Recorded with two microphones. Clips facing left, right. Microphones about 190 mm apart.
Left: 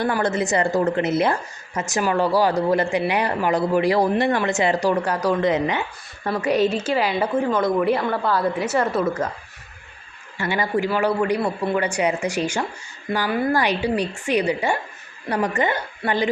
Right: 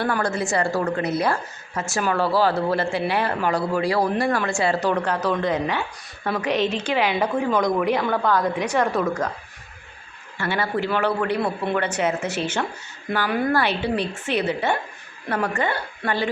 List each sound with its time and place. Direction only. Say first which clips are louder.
0.0 s a woman's voice: left 2 dB; 20° left (ahead or behind)
10.3 s a woman's voice: left 2 dB; 15° left (ahead or behind)
13.2 s a woman's voice: left 1 dB; centre (ahead or behind)
13.5 s a woman's voice: left 1 dB; 15° left (ahead or behind)